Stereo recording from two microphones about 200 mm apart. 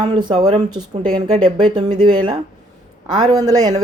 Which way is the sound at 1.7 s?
20° right (ahead or behind).